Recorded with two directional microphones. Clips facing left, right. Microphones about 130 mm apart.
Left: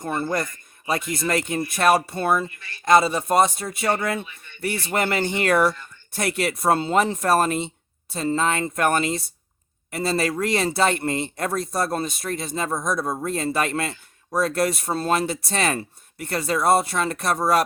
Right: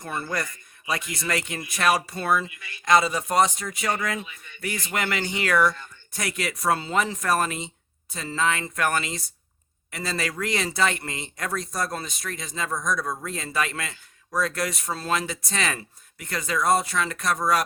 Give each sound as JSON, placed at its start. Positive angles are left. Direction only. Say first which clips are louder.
{"t": 0.0, "sound": "speech", "louder": "left 5 dB", "side_deg": 30}
{"t": 5.0, "sound": "speech", "louder": "left 4 dB", "side_deg": 45}
{"t": 5.5, "sound": "speech", "louder": "left 1 dB", "side_deg": 30}